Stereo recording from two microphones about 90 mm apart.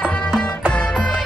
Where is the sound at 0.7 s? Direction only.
10° left (ahead or behind).